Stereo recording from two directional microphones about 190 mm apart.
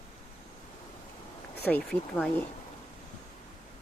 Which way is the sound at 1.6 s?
10° left (ahead or behind).